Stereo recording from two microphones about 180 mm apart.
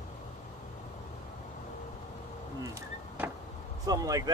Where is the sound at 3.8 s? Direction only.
20° right (ahead or behind).